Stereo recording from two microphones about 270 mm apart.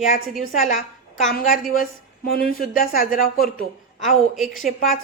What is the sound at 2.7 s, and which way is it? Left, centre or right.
Speech, left.